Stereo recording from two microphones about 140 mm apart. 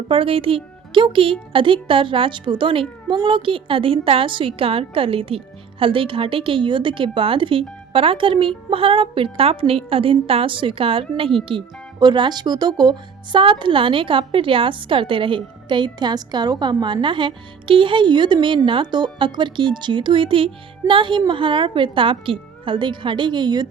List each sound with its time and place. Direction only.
0.1 s speech: 40° right (ahead or behind)